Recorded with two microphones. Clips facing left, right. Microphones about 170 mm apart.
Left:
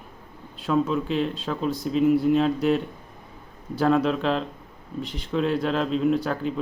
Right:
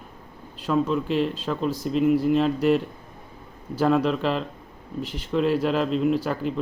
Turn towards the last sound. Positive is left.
turn(degrees=-5)  # may be behind; listen again after turning